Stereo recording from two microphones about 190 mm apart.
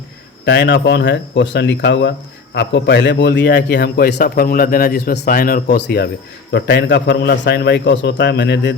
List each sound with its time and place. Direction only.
0.4 s a man's voice: 65° left (ahead or behind)